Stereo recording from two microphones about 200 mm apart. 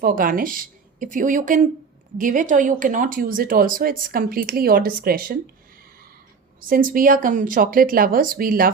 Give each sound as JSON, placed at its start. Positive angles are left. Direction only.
{"t": 0.0, "sound": "speech", "side_deg": -45}
{"t": 6.6, "sound": "speech", "side_deg": -45}